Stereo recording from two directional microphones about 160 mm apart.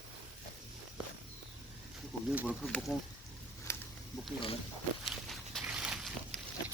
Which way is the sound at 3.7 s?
15° left (ahead or behind).